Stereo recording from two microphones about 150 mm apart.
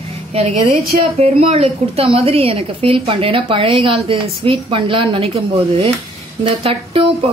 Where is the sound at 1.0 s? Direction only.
45° right (ahead or behind).